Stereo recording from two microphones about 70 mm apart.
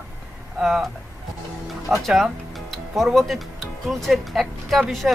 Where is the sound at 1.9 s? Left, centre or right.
Right.